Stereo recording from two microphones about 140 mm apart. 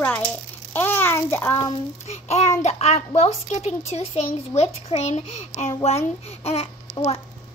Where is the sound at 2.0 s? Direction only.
50° left (ahead or behind).